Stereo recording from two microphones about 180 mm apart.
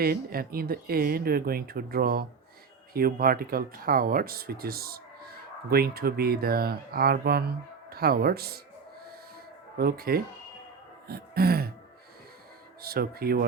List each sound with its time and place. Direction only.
0.0 s speech: 55° right (ahead or behind)
9.7 s speech: 55° right (ahead or behind)
11.1 s a sound: 60° right (ahead or behind)
12.8 s speech: 60° right (ahead or behind)